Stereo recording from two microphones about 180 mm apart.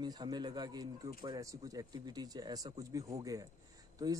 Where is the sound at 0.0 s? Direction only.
25° right (ahead or behind).